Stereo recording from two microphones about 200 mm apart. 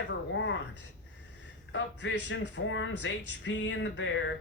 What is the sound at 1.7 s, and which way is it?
Speech, 70° left (ahead or behind).